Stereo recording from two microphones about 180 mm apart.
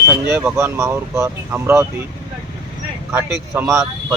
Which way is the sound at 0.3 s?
10° right (ahead or behind).